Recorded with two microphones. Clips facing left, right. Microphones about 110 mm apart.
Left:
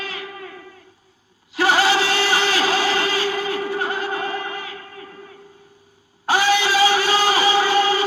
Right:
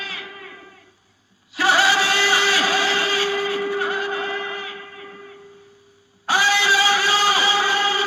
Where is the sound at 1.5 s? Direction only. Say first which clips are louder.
Left 1 dB; 50° left (ahead or behind).